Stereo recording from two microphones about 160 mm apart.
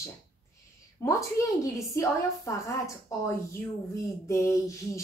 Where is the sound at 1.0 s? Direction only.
15° left (ahead or behind).